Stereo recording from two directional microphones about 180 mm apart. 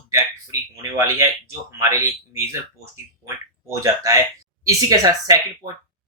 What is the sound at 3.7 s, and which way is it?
Speech, 20° right (ahead or behind).